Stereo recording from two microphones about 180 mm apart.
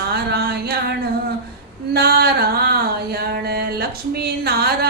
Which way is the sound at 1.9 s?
60° right (ahead or behind).